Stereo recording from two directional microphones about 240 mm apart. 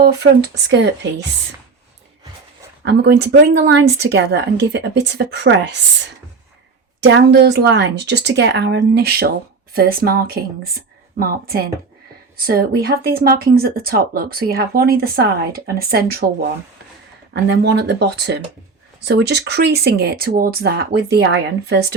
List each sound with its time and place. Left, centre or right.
0.0 s a woman's voice: right
2.8 s a woman's voice: right
7.0 s a woman's voice: right
17.3 s a woman's voice: right